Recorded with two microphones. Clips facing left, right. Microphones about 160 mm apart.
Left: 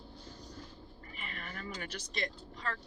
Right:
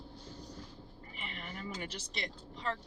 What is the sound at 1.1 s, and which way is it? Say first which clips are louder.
Vehicle: even; 20° right (ahead or behind).